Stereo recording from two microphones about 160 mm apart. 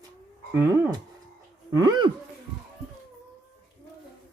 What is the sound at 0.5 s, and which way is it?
Speech, 15° right (ahead or behind).